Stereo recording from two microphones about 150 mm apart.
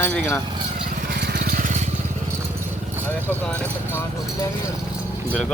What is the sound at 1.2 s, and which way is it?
Vehicle, 90° right.